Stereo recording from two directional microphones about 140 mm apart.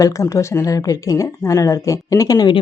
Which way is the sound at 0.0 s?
20° left (ahead or behind).